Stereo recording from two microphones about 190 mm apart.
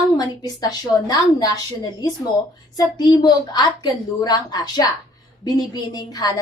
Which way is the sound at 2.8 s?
20° left (ahead or behind).